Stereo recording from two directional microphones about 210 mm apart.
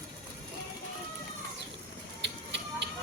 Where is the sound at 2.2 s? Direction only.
55° right (ahead or behind).